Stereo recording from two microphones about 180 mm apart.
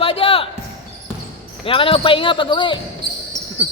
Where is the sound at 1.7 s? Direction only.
30° left (ahead or behind).